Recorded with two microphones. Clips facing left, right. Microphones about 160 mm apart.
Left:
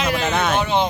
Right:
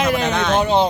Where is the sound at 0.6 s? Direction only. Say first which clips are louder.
Right 3 dB; 40° right (ahead or behind).